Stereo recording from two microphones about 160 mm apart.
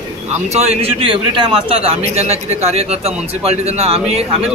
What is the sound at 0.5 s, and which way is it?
Speech, 45° right (ahead or behind).